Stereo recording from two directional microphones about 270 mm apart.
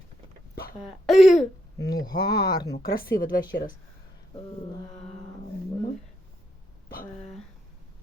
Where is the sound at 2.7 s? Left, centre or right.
Left.